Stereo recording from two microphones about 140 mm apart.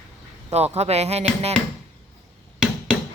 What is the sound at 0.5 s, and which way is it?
Dishes, 50° right (ahead or behind).